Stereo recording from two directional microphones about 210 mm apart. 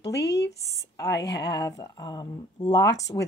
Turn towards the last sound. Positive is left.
turn(degrees=15)  # may be behind; listen again after turning